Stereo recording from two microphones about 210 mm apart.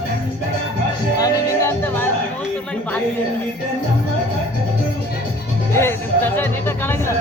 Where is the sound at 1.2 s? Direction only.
10° left (ahead or behind).